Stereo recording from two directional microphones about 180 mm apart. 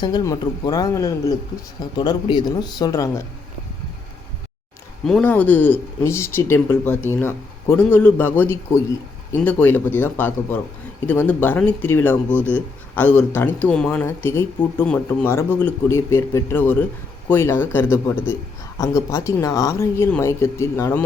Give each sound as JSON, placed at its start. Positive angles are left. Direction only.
{"t": 0.0, "sound": "speech", "side_deg": 25}
{"t": 5.0, "sound": "speech", "side_deg": 5}
{"t": 12.4, "sound": "speech", "side_deg": -10}
{"t": 13.0, "sound": "speech", "side_deg": 10}